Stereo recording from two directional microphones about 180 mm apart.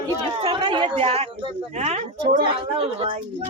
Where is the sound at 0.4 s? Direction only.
30° right (ahead or behind).